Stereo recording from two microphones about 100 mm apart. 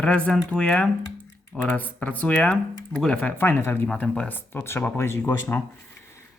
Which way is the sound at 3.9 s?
5° left (ahead or behind).